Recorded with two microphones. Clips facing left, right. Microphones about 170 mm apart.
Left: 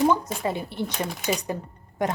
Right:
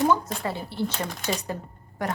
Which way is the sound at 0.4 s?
20° left (ahead or behind).